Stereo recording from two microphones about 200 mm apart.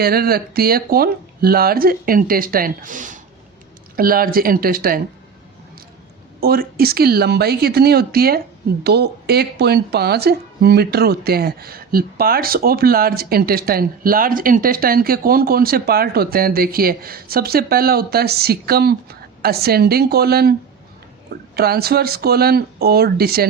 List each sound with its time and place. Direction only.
0.0 s a woman's voice: 50° right (ahead or behind)
6.4 s a woman's voice: 50° right (ahead or behind)